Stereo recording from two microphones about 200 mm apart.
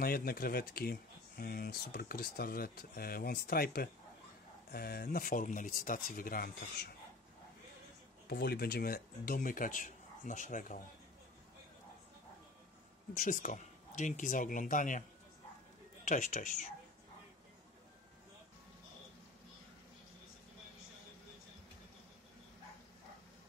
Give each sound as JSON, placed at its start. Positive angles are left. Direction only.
{"t": 0.0, "sound": "speech", "side_deg": 50}
{"t": 8.3, "sound": "speech", "side_deg": 55}
{"t": 13.1, "sound": "speech", "side_deg": 40}
{"t": 16.1, "sound": "speech", "side_deg": 40}